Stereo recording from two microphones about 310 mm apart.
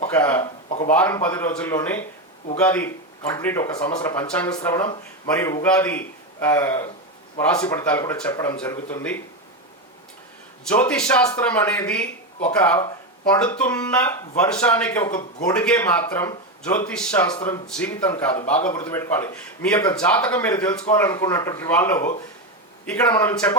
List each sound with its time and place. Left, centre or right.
0.1 s speech: centre
10.7 s speech: centre
23.1 s speech: centre